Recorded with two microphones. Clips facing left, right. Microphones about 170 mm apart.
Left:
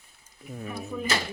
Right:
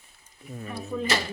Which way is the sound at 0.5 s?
Centre (ahead or behind).